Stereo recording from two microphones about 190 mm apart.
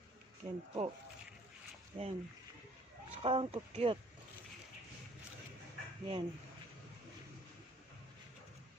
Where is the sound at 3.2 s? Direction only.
30° right (ahead or behind).